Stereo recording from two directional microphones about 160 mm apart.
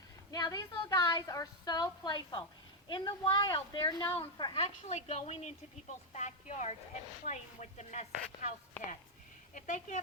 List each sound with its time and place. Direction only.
0.3 s a woman's voice: 25° left (ahead or behind)
4.6 s speech: 40° left (ahead or behind)
9.6 s speech: 50° left (ahead or behind)